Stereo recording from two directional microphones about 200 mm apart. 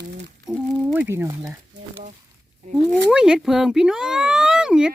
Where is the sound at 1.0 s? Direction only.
15° right (ahead or behind).